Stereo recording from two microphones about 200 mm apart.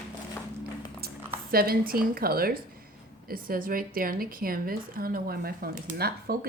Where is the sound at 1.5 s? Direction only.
50° right (ahead or behind).